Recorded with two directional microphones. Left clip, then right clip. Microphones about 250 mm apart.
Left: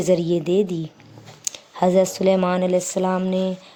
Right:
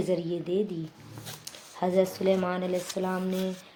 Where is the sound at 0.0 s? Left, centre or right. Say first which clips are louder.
Left 10 dB; left.